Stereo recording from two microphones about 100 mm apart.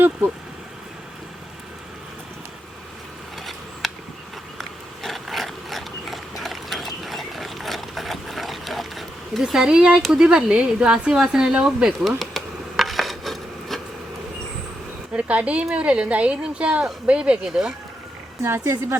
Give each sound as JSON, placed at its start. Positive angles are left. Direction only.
{"t": 5.0, "sound": "dog", "side_deg": 0}
{"t": 10.0, "sound": "a sound", "side_deg": -5}
{"t": 15.1, "sound": "speech", "side_deg": -15}
{"t": 18.4, "sound": "speech", "side_deg": -25}